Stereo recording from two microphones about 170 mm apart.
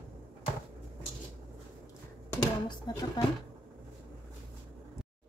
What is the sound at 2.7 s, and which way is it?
Speech, 25° left (ahead or behind).